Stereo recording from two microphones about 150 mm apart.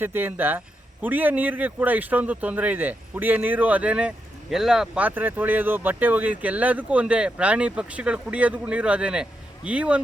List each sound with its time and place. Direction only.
0.0 s speech: 15° right (ahead or behind)